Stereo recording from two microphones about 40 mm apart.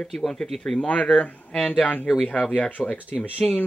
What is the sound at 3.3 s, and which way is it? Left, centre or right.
Speech, left.